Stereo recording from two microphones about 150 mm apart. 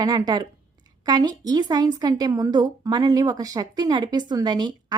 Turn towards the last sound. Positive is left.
turn(degrees=-30)  # may be behind; listen again after turning